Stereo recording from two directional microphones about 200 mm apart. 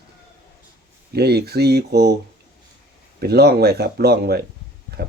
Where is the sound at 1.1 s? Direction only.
55° right (ahead or behind).